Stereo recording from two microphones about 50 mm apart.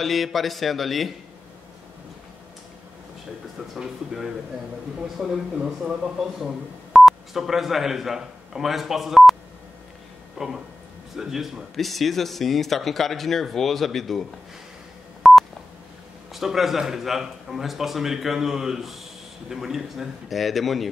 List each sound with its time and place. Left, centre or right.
0.0 s a man's voice: centre
3.7 s speech: centre
6.1 s speech: centre
10.3 s a sound: centre
11.1 s a man's voice: centre
15.2 s telephone dialing: centre
16.3 s a man's voice: centre